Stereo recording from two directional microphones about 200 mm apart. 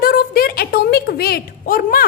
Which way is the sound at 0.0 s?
50° left (ahead or behind).